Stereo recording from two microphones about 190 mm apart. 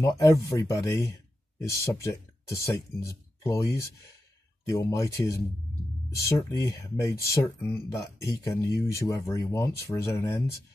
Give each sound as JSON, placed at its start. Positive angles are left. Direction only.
{"t": 0.0, "sound": "speech", "side_deg": 15}